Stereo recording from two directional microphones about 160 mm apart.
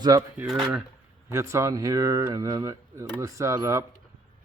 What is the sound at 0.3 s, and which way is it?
Speech, centre (ahead or behind).